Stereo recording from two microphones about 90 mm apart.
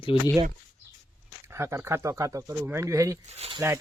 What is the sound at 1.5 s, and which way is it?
Speech, 30° right (ahead or behind).